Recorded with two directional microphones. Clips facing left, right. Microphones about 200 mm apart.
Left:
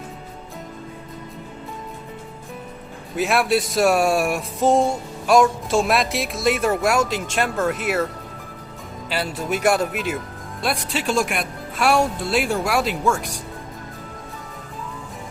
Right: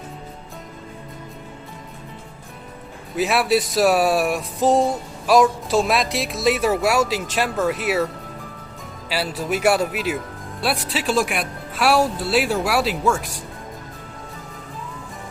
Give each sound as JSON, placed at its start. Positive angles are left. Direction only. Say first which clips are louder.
{"t": 3.2, "sound": "speech", "louder": "right 1 dB", "side_deg": 0}
{"t": 9.3, "sound": "speech", "louder": "right 1 dB", "side_deg": -5}